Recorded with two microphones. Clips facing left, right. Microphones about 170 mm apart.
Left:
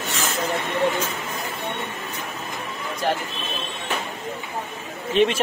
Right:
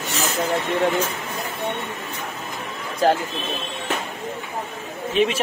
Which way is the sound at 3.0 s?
90° right.